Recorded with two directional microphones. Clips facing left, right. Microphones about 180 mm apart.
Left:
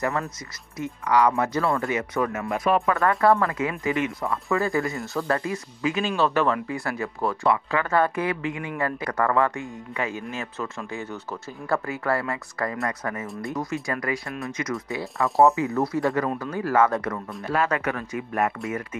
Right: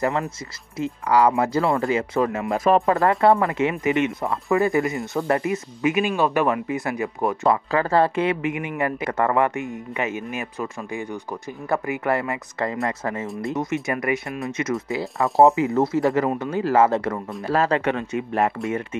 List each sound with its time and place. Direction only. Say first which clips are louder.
1.0 s speech: right 2 dB; 30° right (ahead or behind)
7.4 s speech: right 3 dB; 35° right (ahead or behind)